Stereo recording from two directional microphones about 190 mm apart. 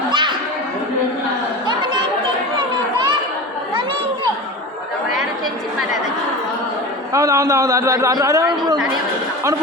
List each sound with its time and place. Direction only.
0.1 s chatter: 25° right (ahead or behind)
7.1 s a man's voice: 15° right (ahead or behind)